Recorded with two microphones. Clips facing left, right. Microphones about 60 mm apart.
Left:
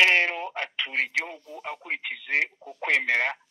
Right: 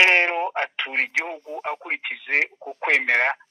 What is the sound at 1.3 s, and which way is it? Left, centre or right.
Speech, right.